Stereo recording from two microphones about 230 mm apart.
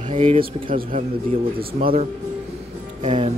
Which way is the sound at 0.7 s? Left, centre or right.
Right.